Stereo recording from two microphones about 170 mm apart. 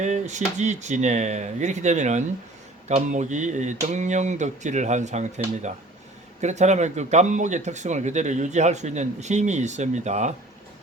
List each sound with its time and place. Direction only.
0.0 s speech: 45° right (ahead or behind)
6.4 s speech: 45° right (ahead or behind)